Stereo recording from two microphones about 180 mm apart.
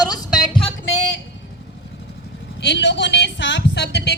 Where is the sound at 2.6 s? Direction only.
75° left (ahead or behind).